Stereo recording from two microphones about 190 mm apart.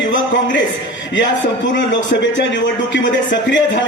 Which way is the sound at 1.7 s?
70° left (ahead or behind).